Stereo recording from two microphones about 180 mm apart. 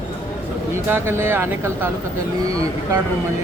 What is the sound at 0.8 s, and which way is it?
A man's voice, 15° right (ahead or behind).